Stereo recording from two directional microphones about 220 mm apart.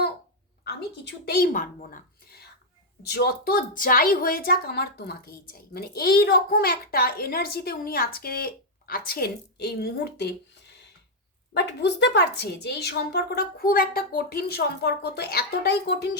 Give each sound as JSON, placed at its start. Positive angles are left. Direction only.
{"t": 0.6, "sound": "a woman's voice", "side_deg": 45}
{"t": 11.5, "sound": "a woman's voice", "side_deg": 50}